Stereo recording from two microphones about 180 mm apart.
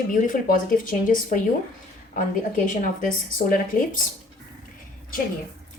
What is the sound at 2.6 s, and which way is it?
A woman's voice, 50° left (ahead or behind).